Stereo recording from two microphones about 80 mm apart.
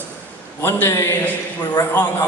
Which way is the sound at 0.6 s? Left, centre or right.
Left.